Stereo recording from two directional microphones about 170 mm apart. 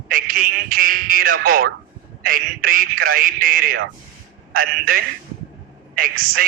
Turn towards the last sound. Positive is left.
turn(degrees=-55)  # may be behind; listen again after turning